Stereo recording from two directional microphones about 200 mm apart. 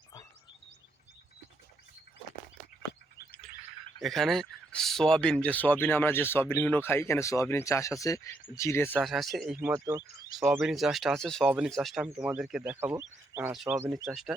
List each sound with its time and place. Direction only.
4.0 s speech: centre (ahead or behind)
9.0 s speech: centre (ahead or behind)
9.6 s speech: 15° right (ahead or behind)
10.6 s speech: centre (ahead or behind)